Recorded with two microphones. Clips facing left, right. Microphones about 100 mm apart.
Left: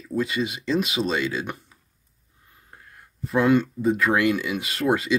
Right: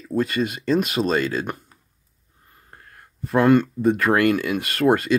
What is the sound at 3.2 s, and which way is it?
Speech, centre (ahead or behind).